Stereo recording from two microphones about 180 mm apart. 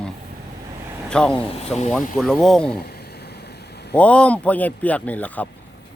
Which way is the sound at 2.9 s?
65° left (ahead or behind).